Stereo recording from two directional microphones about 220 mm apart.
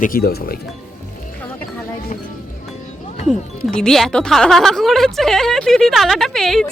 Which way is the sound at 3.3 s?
Centre (ahead or behind).